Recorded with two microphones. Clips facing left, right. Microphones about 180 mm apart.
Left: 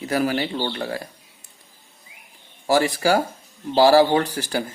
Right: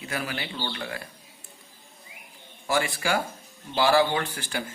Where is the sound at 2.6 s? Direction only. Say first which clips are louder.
Left 8 dB; 40° left (ahead or behind).